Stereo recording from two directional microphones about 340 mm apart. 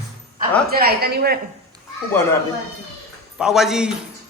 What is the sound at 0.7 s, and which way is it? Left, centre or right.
Speech, right.